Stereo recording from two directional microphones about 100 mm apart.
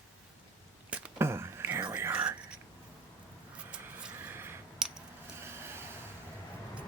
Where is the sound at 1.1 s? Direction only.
25° right (ahead or behind).